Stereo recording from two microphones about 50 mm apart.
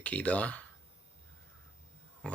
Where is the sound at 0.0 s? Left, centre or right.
Left.